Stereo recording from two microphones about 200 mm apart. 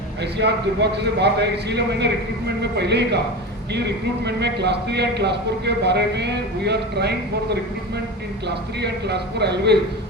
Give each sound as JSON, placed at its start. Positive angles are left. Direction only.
{"t": 0.3, "sound": "a man's voice", "side_deg": -55}
{"t": 8.8, "sound": "a man's voice", "side_deg": -55}